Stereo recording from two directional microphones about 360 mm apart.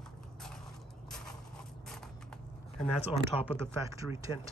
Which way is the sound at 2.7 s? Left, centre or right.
Centre.